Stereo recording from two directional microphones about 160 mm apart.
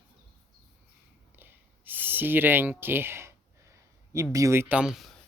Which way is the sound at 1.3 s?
10° right (ahead or behind).